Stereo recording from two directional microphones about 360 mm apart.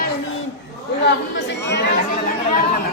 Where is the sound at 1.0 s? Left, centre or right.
Left.